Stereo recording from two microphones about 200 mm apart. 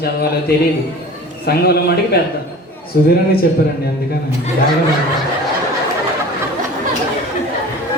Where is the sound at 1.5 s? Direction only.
50° left (ahead or behind).